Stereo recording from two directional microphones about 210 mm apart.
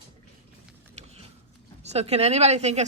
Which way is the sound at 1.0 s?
30° right (ahead or behind).